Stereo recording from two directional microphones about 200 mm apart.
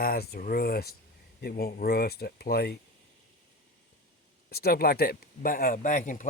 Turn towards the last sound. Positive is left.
turn(degrees=40)  # may be behind; listen again after turning